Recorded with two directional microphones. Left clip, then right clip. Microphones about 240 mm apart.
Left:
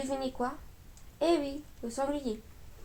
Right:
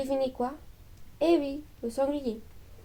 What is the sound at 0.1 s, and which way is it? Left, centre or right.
Speech, right.